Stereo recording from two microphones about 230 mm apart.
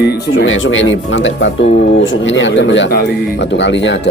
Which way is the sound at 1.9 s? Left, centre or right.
Left.